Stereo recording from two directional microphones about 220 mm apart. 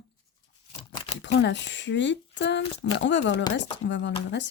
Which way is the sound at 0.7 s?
20° left (ahead or behind).